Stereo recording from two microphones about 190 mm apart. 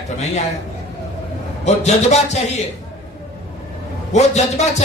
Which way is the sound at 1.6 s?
35° left (ahead or behind).